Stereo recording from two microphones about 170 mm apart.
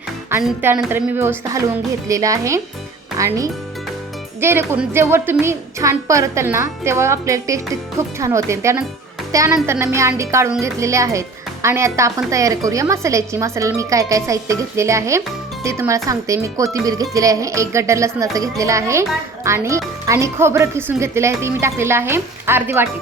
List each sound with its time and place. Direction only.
0.6 s speech: 10° right (ahead or behind)